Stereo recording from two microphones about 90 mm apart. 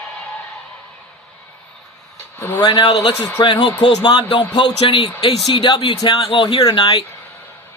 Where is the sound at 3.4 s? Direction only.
60° left (ahead or behind).